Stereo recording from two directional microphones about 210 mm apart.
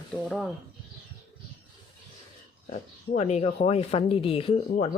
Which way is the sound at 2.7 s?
35° left (ahead or behind).